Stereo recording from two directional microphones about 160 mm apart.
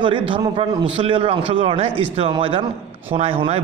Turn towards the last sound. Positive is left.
turn(degrees=-35)  # may be behind; listen again after turning